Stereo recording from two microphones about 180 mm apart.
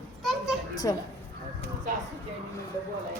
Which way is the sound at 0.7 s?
20° left (ahead or behind).